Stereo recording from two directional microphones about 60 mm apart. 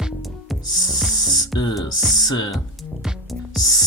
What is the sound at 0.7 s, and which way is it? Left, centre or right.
Speech, left.